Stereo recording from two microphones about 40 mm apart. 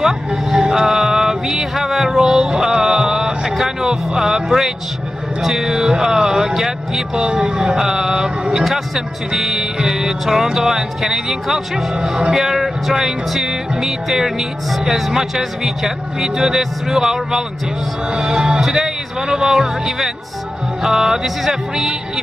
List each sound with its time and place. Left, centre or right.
0.0 s a sound: centre
3.8 s speech: centre
7.2 s speech: right
7.7 s speech: centre
8.6 s speech: centre
18.1 s music: centre
18.6 s speech: centre